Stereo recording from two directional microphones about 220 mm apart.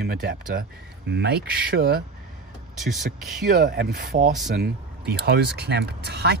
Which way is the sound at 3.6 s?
45° right (ahead or behind).